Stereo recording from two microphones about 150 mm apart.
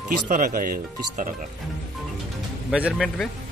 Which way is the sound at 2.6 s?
5° right (ahead or behind).